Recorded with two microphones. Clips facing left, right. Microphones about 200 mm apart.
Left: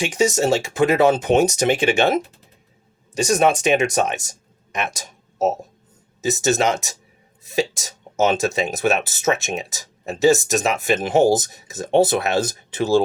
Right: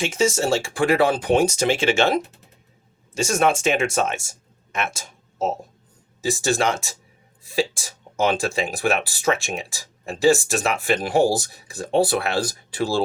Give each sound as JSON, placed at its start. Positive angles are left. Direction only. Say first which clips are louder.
{"t": 0.0, "sound": "speech", "louder": "left 2 dB", "side_deg": 15}
{"t": 3.2, "sound": "speech", "louder": "left 3 dB", "side_deg": 15}